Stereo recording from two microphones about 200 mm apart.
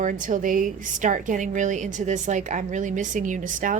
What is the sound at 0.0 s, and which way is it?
A woman's voice, 40° right (ahead or behind).